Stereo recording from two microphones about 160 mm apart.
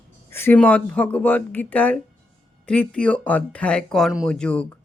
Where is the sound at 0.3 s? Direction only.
15° left (ahead or behind).